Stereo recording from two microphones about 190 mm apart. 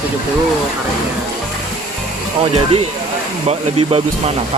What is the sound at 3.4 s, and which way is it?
Speech, 30° right (ahead or behind).